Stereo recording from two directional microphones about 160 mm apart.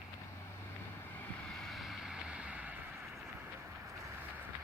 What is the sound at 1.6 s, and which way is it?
Vehicle, centre (ahead or behind).